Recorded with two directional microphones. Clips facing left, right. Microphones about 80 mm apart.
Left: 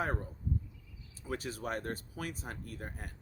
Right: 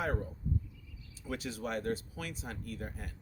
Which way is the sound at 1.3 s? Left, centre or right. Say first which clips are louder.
Even; left.